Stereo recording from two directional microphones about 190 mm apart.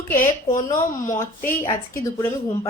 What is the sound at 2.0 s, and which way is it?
Speech, 15° left (ahead or behind).